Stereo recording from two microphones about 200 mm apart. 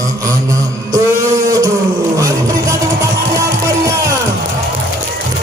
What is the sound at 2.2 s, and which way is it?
Music, 15° right (ahead or behind).